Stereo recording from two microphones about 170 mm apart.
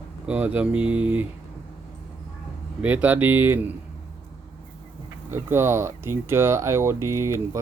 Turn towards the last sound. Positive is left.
turn(degrees=-15)  # may be behind; listen again after turning